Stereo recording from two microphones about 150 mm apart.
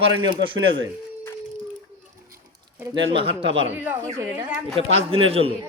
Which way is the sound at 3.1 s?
35° right (ahead or behind).